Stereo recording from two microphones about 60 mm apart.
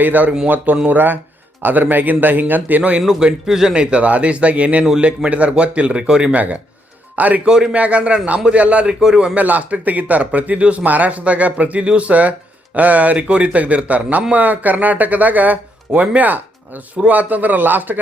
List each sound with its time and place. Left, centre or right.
0.0 s speech: right
3.0 s speech: centre; by 7.4 s right
7.4 s a man's voice: centre
9.4 s speech: right